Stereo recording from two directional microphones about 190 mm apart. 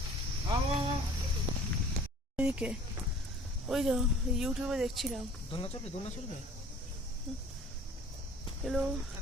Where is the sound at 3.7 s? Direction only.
Centre (ahead or behind).